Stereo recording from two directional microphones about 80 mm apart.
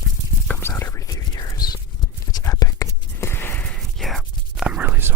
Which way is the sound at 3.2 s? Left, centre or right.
Left.